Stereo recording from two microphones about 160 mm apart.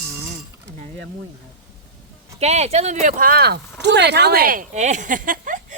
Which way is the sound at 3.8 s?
90° right.